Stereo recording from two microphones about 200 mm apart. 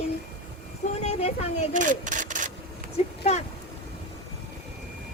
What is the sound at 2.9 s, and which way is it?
Speech, 35° left (ahead or behind).